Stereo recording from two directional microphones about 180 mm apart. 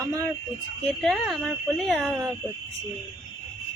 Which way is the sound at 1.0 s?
Centre (ahead or behind).